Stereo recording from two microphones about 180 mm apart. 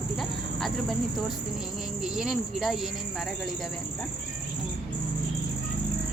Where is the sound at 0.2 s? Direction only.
Centre (ahead or behind).